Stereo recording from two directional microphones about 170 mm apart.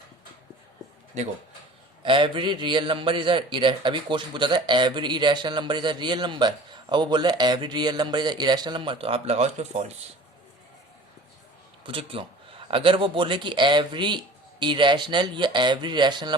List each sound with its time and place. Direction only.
2.0 s a man's voice: 30° right (ahead or behind)
11.9 s a man's voice: 30° right (ahead or behind)